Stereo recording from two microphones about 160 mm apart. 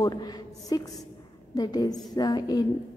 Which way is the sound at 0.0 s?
25° left (ahead or behind).